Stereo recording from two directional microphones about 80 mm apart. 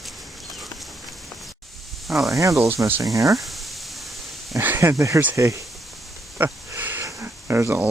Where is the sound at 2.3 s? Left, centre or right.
Right.